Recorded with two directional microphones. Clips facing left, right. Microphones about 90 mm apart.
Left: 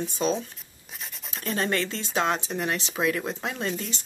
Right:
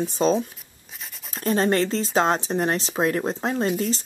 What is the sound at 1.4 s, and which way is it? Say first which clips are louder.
Speech: right 6 dB; 35° right (ahead or behind).